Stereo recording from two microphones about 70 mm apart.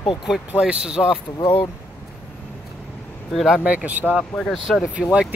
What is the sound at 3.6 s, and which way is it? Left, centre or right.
Speech, centre.